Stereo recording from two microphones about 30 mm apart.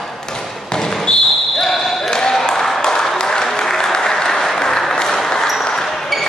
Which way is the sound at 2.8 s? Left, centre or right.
Centre.